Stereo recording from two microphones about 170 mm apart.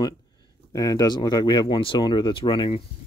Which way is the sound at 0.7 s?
20° left (ahead or behind).